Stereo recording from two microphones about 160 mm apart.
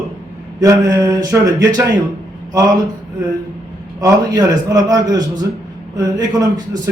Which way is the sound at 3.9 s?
20° right (ahead or behind).